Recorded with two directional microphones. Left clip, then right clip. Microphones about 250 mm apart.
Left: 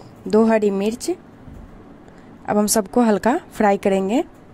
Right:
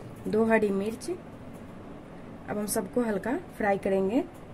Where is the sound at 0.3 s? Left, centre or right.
Left.